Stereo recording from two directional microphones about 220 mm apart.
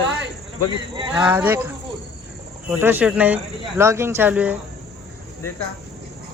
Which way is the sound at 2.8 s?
10° right (ahead or behind).